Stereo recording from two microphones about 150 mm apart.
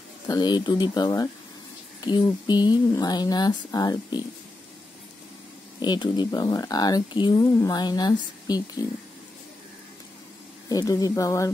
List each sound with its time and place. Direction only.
0.3 s speech: 30° left (ahead or behind)
5.8 s speech: 30° left (ahead or behind)
10.7 s speech: 25° left (ahead or behind)